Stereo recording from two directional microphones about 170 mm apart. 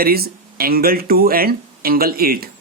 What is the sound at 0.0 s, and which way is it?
Speech, 65° right (ahead or behind).